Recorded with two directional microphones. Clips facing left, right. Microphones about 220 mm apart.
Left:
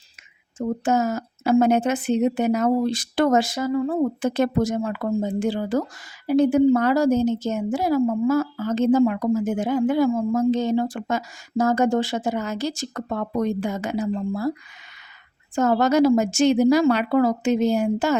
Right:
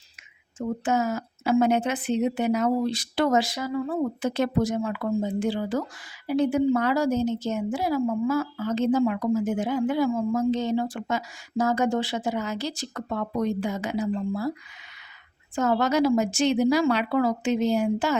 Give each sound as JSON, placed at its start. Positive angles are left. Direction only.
{"t": 0.9, "sound": "a woman's voice", "side_deg": 40}
{"t": 15.5, "sound": "a woman's voice", "side_deg": 45}